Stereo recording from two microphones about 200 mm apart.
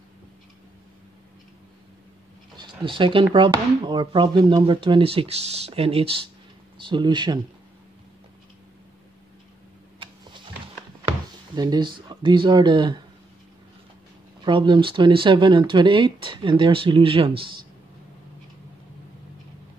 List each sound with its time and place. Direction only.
2.5 s speech: 25° right (ahead or behind)
11.5 s speech: 20° right (ahead or behind)
14.4 s speech: 25° right (ahead or behind)